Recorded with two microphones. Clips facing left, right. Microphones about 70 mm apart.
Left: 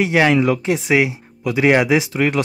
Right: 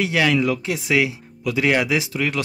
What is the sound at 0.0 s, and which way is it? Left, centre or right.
Speech, left.